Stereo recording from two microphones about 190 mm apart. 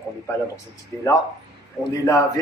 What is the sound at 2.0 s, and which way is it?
Speech, 15° left (ahead or behind).